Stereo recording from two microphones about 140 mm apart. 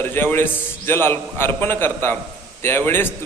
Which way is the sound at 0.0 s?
15° left (ahead or behind).